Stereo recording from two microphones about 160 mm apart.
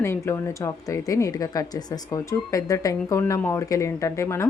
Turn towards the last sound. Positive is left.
turn(degrees=20)  # may be behind; listen again after turning